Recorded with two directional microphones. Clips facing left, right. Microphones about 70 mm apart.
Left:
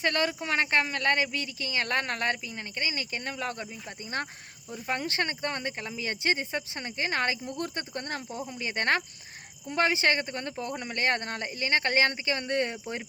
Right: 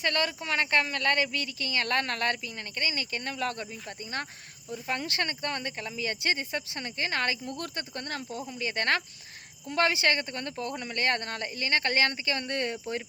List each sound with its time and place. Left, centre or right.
0.0 s speech: left
4.7 s speech: left